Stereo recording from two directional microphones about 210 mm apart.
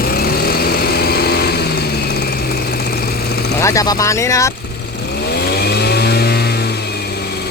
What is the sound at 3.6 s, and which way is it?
Speech, 15° left (ahead or behind).